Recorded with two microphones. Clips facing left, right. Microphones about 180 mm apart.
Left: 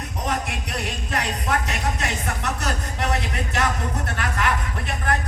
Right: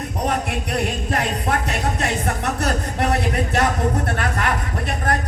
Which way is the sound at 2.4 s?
60° right (ahead or behind).